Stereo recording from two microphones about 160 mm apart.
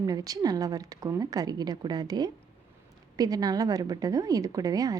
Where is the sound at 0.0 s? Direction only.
25° right (ahead or behind).